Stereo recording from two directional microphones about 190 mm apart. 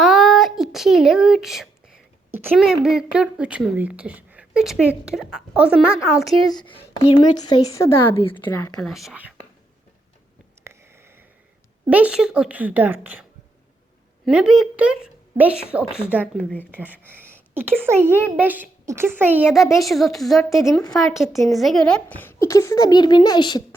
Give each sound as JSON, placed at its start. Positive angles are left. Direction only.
{"t": 0.0, "sound": "a sound", "side_deg": 0}
{"t": 2.3, "sound": "a woman's voice", "side_deg": -5}
{"t": 6.6, "sound": "a woman's voice", "side_deg": 25}
{"t": 10.6, "sound": "a sound", "side_deg": -15}
{"t": 11.9, "sound": "a woman's voice", "side_deg": -5}
{"t": 14.3, "sound": "a woman's voice", "side_deg": 0}
{"t": 16.7, "sound": "a woman's voice", "side_deg": -10}